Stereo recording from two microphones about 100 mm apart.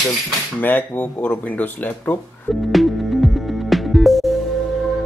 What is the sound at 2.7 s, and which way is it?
Music, centre (ahead or behind).